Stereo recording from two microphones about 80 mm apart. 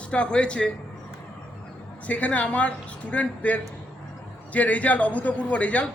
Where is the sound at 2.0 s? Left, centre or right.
Centre.